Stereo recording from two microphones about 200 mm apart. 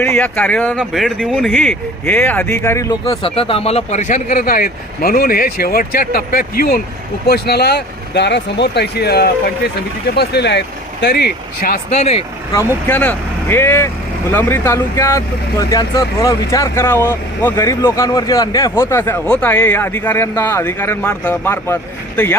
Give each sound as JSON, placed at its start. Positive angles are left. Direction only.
{"t": 0.0, "sound": "speech", "side_deg": 10}
{"t": 3.1, "sound": "speech", "side_deg": 25}
{"t": 11.9, "sound": "speech", "side_deg": 30}
{"t": 12.9, "sound": "speech", "side_deg": 10}